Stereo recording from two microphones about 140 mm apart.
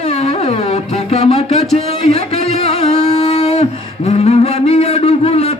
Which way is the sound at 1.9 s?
45° left (ahead or behind).